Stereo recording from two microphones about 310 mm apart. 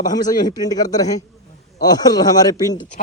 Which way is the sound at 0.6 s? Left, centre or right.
Centre.